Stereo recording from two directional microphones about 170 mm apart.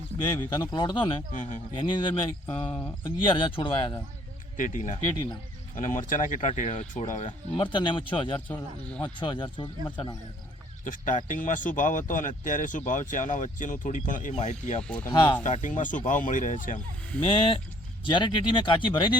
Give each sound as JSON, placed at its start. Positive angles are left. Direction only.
{"t": 0.2, "sound": "speech", "side_deg": 25}
{"t": 2.6, "sound": "speech", "side_deg": 10}
{"t": 3.0, "sound": "speech", "side_deg": 30}
{"t": 4.5, "sound": "speech", "side_deg": 50}
{"t": 7.3, "sound": "speech", "side_deg": 30}
{"t": 10.8, "sound": "speech", "side_deg": 50}
{"t": 14.8, "sound": "speech", "side_deg": 5}
{"t": 15.1, "sound": "speech", "side_deg": 25}
{"t": 15.6, "sound": "speech", "side_deg": 50}
{"t": 17.2, "sound": "speech", "side_deg": 30}